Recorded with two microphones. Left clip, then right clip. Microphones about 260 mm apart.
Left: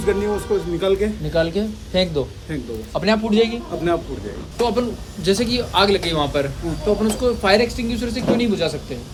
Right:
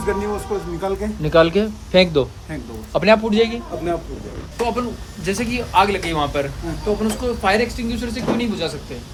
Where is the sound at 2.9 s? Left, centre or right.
Right.